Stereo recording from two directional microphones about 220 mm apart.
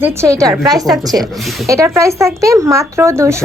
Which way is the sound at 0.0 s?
15° right (ahead or behind).